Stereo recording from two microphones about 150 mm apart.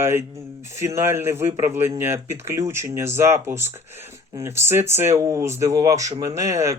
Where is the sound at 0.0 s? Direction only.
15° right (ahead or behind).